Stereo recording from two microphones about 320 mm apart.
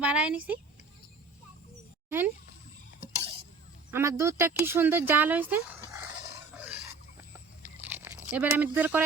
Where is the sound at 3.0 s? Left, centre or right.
Centre.